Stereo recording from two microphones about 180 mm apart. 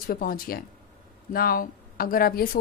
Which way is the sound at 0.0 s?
55° left (ahead or behind).